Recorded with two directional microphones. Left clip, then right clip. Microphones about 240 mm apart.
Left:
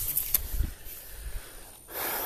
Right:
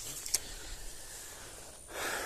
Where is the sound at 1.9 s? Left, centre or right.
Centre.